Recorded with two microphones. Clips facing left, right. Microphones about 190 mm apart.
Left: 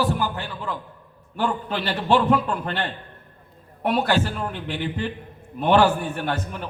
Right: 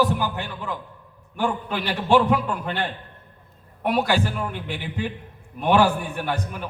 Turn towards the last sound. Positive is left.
turn(degrees=-10)  # may be behind; listen again after turning